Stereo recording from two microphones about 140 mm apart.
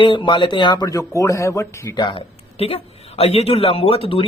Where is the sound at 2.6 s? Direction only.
45° left (ahead or behind).